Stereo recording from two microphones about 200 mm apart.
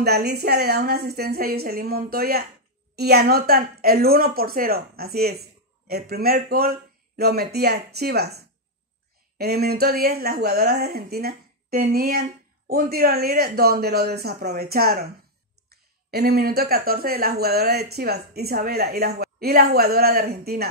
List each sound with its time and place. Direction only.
0.0 s speech: 55° right (ahead or behind)
9.4 s speech: 50° right (ahead or behind)